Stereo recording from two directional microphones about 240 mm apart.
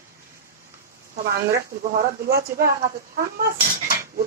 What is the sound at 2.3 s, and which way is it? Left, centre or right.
Speech, right.